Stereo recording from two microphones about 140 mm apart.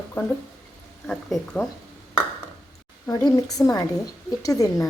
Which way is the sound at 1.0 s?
5° left (ahead or behind).